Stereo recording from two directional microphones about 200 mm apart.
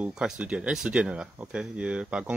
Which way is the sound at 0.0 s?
5° right (ahead or behind).